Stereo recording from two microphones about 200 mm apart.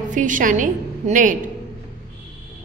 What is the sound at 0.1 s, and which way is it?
A woman's voice, 40° right (ahead or behind).